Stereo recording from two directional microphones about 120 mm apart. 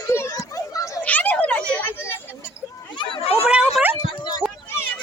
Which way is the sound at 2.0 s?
20° left (ahead or behind).